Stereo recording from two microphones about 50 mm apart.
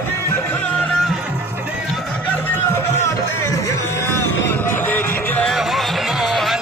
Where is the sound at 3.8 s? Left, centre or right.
Left.